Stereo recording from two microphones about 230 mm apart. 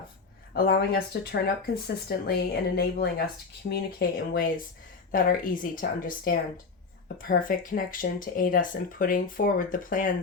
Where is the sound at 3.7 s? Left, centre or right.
Left.